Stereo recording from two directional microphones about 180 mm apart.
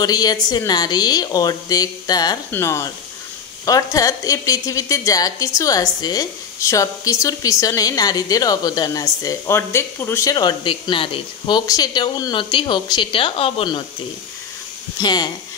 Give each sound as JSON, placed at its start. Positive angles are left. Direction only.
{"t": 0.0, "sound": "a woman's voice", "side_deg": 20}
{"t": 15.0, "sound": "a woman's voice", "side_deg": 25}